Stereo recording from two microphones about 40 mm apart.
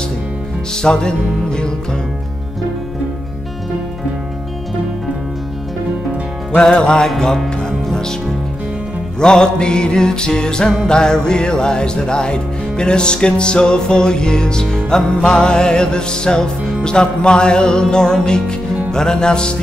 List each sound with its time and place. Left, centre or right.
0.8 s music: left
6.5 s music: left
9.2 s music: centre